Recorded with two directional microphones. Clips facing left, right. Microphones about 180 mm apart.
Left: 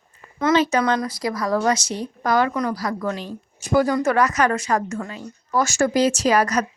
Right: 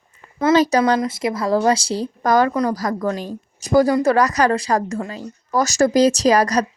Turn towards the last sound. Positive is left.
turn(degrees=-35)  # may be behind; listen again after turning